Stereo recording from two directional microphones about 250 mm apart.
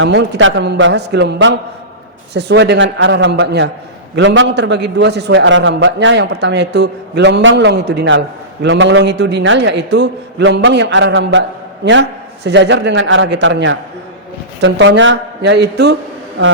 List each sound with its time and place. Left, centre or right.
0.0 s a man's voice: right